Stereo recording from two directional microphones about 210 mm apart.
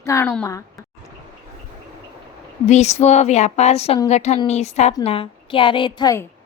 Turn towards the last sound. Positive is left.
turn(degrees=15)  # may be behind; listen again after turning